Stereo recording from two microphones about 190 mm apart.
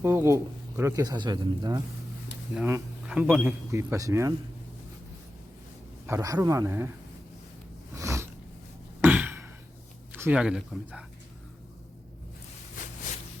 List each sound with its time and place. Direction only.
0.0 s speech: 15° right (ahead or behind)
2.6 s speech: 10° right (ahead or behind)
6.1 s speech: 15° right (ahead or behind)
7.9 s a sound: 15° right (ahead or behind)
10.1 s speech: 10° right (ahead or behind)
12.8 s a sound: 45° left (ahead or behind)